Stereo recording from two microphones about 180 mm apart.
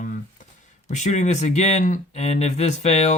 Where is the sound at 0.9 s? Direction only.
40° left (ahead or behind).